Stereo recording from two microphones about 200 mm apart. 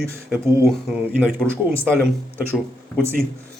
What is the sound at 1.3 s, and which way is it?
Speech, 10° right (ahead or behind).